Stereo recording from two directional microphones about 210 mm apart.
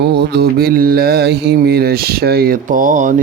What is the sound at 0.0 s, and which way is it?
Speech, 50° right (ahead or behind).